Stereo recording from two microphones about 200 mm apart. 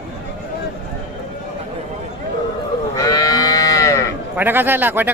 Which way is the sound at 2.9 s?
15° left (ahead or behind).